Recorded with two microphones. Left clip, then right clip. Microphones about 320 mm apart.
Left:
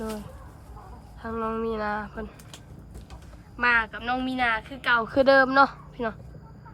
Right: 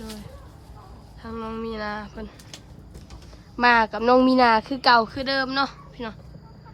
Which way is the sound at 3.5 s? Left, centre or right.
Centre.